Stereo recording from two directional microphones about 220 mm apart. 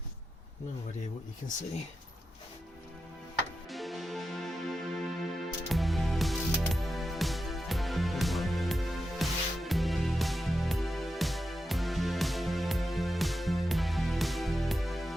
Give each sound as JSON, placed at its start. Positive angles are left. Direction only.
{"t": 3.7, "sound": "music", "side_deg": 0}